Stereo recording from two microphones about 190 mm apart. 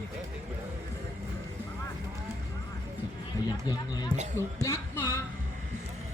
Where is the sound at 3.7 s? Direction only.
20° left (ahead or behind).